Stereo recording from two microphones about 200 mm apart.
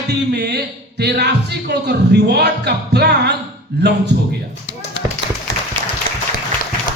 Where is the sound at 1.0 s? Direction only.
55° right (ahead or behind).